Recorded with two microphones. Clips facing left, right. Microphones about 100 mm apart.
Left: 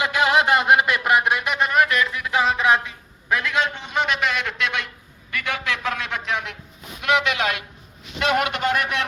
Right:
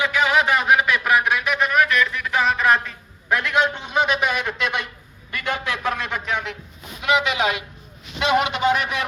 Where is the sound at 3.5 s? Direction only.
15° right (ahead or behind).